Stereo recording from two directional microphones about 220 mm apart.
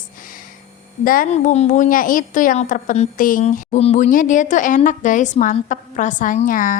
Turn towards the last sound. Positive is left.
turn(degrees=40)  # may be behind; listen again after turning